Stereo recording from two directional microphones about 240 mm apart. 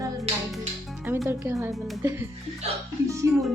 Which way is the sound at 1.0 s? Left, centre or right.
Centre.